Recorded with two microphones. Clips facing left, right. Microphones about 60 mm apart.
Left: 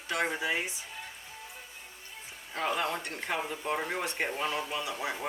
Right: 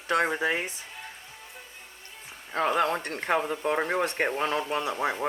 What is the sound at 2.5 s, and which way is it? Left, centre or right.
Speech, right.